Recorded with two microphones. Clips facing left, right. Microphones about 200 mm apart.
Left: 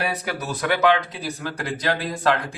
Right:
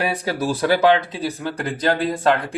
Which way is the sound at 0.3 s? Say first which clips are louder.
Right 8 dB; 30° right (ahead or behind).